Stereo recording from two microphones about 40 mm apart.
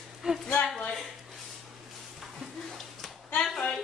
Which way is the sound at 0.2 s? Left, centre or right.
Centre.